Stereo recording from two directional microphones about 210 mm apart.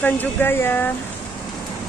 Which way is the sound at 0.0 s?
10° left (ahead or behind).